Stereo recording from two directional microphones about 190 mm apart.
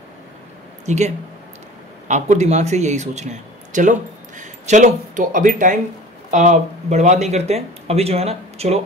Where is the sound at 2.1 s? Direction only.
35° right (ahead or behind).